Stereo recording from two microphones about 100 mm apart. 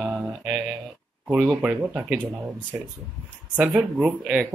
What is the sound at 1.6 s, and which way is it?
Speech, 10° right (ahead or behind).